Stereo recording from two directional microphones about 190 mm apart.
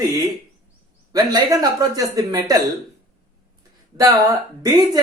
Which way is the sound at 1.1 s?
20° right (ahead or behind).